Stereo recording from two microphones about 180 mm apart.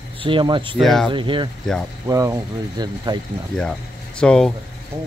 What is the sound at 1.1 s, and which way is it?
Speech, 25° right (ahead or behind).